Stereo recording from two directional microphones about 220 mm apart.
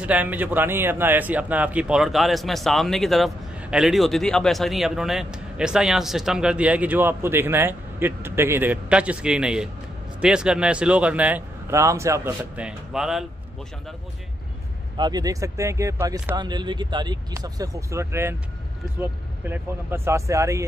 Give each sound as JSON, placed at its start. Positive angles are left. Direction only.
{"t": 0.0, "sound": "a man's voice", "side_deg": -5}
{"t": 15.0, "sound": "speech", "side_deg": -20}